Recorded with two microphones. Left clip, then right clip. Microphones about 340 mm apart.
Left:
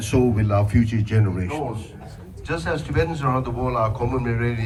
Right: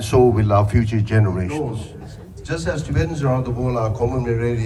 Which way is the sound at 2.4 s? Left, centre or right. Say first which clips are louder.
Right 1 dB; centre.